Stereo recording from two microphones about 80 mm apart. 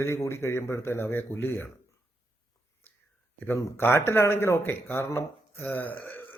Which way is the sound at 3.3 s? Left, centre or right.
Left.